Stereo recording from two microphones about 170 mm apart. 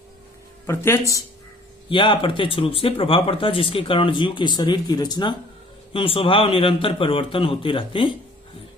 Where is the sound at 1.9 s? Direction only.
30° left (ahead or behind).